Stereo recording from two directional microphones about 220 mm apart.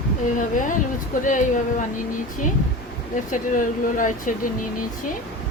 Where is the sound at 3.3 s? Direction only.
35° left (ahead or behind).